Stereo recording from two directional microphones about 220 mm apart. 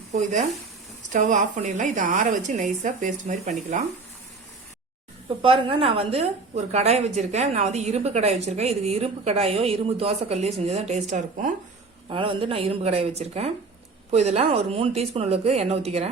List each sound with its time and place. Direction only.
0.1 s a woman's voice: 35° right (ahead or behind)
5.4 s a woman's voice: 25° right (ahead or behind)
12.0 s a woman's voice: 25° right (ahead or behind)